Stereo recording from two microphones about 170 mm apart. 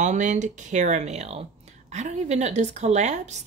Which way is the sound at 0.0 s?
45° right (ahead or behind).